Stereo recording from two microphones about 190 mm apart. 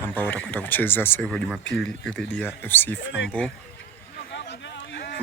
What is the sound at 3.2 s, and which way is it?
Speech, 75° left (ahead or behind).